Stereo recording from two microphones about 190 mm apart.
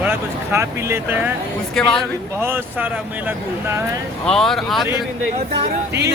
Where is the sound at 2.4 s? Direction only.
10° right (ahead or behind).